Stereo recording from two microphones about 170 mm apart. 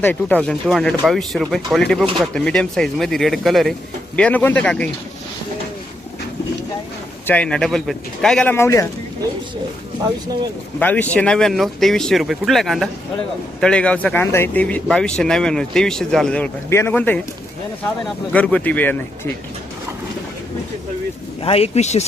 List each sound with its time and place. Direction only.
0.0 s speech: 10° left (ahead or behind)
7.3 s speech: 5° left (ahead or behind)
10.8 s speech: 10° left (ahead or behind)
18.3 s speech: 10° left (ahead or behind)
21.4 s speech: 35° left (ahead or behind)